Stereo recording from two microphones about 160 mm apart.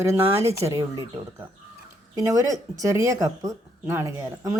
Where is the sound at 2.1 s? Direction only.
20° right (ahead or behind).